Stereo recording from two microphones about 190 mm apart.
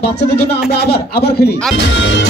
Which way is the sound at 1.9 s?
75° left (ahead or behind).